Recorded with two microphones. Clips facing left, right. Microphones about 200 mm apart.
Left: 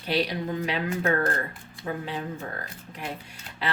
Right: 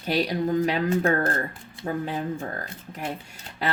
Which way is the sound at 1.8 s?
35° right (ahead or behind).